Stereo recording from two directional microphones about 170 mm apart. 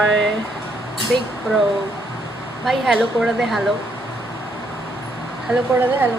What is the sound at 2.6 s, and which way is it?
Speech, centre (ahead or behind).